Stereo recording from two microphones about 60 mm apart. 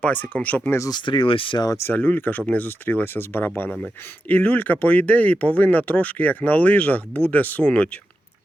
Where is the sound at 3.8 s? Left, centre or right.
Left.